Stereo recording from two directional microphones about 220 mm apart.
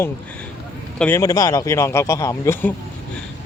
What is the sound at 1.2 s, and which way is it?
Speech, 15° left (ahead or behind).